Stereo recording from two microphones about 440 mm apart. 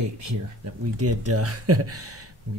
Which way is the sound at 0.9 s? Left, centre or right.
Right.